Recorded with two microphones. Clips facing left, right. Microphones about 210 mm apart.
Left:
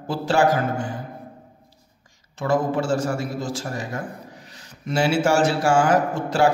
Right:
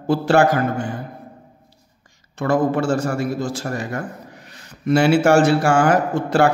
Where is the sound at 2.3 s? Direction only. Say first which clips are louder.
Right 3 dB; 60° right (ahead or behind).